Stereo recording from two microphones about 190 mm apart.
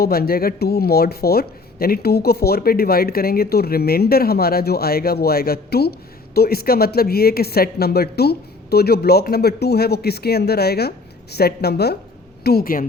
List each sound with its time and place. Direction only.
0.0 s speech: 55° left (ahead or behind)